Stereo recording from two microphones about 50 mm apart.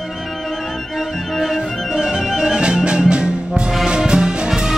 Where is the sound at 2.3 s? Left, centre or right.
Centre.